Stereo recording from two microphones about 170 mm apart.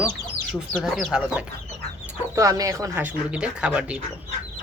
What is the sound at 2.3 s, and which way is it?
Speech, 20° right (ahead or behind).